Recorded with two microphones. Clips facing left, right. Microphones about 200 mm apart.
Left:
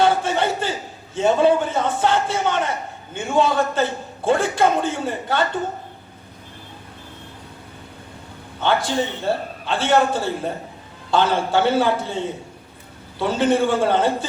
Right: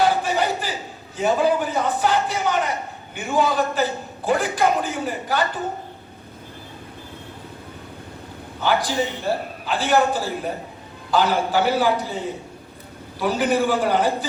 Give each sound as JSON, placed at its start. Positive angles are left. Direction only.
{"t": 0.0, "sound": "a sound", "side_deg": 25}
{"t": 1.1, "sound": "a man's voice", "side_deg": 25}
{"t": 8.6, "sound": "a man's voice", "side_deg": 25}